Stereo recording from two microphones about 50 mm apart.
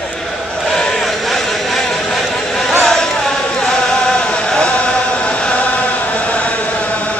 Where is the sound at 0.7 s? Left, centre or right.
Centre.